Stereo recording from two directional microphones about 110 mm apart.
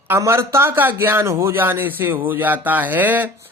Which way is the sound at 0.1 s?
25° right (ahead or behind).